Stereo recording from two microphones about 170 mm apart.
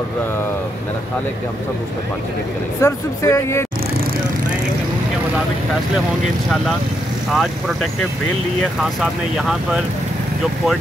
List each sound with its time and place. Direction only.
2.8 s speech: 20° left (ahead or behind)
7.3 s speech: centre (ahead or behind)